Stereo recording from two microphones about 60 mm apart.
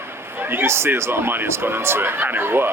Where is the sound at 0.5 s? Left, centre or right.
Right.